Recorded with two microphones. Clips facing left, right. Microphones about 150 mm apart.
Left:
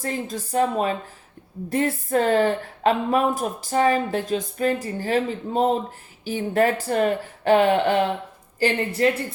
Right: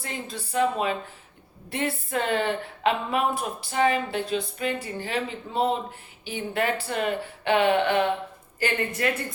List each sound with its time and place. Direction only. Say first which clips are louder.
0.0 s a woman's voice: left 7 dB; 45° left (ahead or behind)